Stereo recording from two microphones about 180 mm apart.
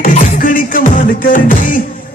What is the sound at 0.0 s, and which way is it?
Music, 45° left (ahead or behind).